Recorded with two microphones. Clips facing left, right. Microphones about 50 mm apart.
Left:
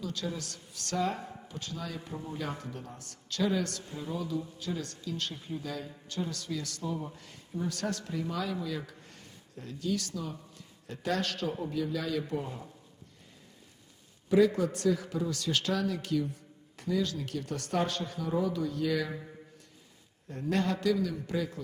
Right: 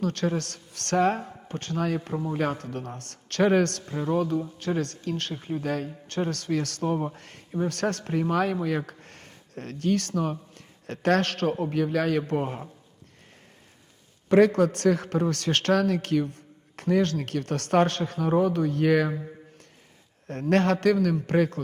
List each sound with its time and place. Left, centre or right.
0.0 s a man's voice: right
14.3 s a man's voice: right
20.2 s a man's voice: right